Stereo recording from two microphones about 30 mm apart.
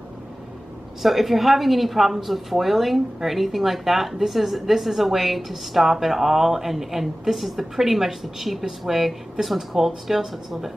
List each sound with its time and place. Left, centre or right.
1.0 s a woman's voice: centre